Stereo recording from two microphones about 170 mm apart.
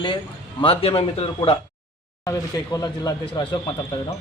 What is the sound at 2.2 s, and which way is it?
Speech, 20° left (ahead or behind).